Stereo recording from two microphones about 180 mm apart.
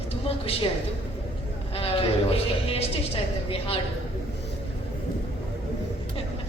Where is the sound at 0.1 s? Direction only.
30° left (ahead or behind).